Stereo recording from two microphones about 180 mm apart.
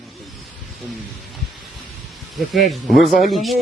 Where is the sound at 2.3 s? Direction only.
Centre (ahead or behind).